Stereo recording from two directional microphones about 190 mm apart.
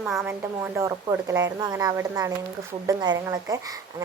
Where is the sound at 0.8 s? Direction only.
15° right (ahead or behind).